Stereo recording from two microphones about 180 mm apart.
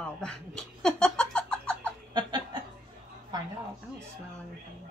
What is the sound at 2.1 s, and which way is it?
Snicker, 25° right (ahead or behind).